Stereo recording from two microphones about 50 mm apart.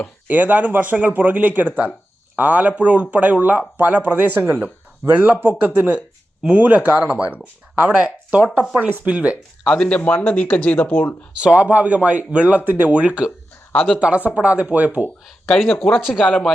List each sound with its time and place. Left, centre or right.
0.3 s speech: right
9.6 s speech: centre
9.9 s speech: left
11.3 s speech: right
15.8 s speech: centre
16.2 s speech: centre